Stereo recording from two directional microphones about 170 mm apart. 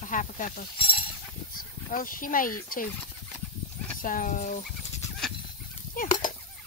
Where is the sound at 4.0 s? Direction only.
55° left (ahead or behind).